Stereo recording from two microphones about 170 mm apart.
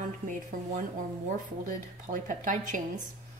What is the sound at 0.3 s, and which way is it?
Speech, 50° right (ahead or behind).